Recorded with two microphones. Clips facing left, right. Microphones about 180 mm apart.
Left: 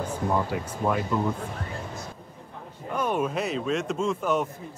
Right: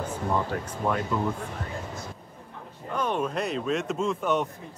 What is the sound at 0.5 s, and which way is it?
Speech, 5° left (ahead or behind).